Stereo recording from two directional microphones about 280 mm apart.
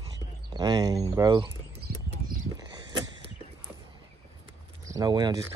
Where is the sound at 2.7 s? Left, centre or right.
Centre.